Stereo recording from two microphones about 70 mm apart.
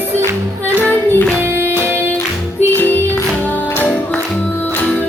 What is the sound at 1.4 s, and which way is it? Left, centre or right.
Music, right.